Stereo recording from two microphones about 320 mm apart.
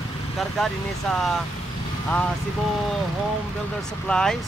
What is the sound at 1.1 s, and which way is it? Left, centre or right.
Speech, centre.